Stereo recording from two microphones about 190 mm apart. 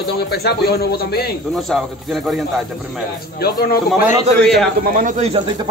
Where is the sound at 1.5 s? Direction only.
Centre (ahead or behind).